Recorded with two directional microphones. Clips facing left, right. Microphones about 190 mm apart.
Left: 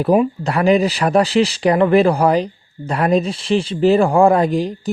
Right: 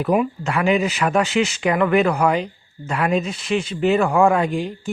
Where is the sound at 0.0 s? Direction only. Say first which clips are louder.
Left 4 dB; 35° left (ahead or behind).